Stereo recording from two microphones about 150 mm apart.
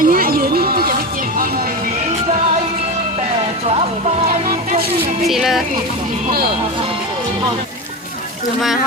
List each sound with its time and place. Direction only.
0.0 s music: 70° right (ahead or behind)
4.4 s a sound: 65° right (ahead or behind)
5.3 s speech: centre (ahead or behind)